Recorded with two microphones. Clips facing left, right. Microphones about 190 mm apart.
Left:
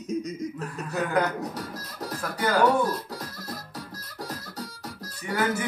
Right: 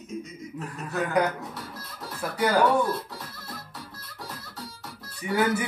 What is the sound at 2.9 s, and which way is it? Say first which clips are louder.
Music: even; 40° left (ahead or behind).